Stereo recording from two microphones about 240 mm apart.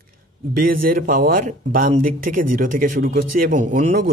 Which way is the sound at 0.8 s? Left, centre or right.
Right.